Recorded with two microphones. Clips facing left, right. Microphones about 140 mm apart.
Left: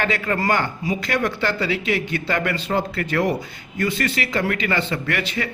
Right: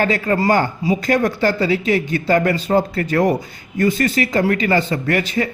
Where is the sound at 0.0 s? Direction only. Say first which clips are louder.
Right 5 dB; 35° right (ahead or behind).